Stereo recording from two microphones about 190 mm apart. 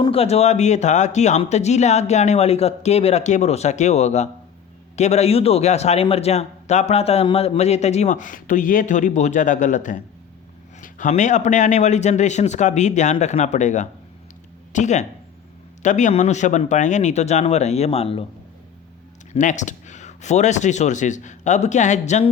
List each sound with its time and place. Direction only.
0.0 s a man's voice: 30° left (ahead or behind)
19.3 s speech: 40° left (ahead or behind)